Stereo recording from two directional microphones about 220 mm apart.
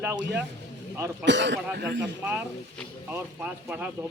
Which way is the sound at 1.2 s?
55° right (ahead or behind).